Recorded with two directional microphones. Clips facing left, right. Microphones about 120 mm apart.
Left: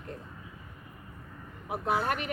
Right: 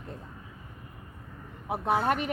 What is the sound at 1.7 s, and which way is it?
Speech, 35° right (ahead or behind).